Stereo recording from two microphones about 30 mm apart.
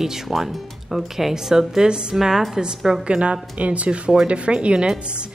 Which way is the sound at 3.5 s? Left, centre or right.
Right.